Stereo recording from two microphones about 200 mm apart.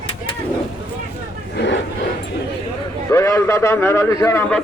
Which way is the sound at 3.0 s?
15° left (ahead or behind).